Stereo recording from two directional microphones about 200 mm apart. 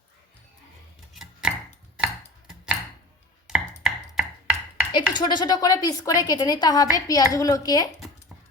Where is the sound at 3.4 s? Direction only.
Centre (ahead or behind).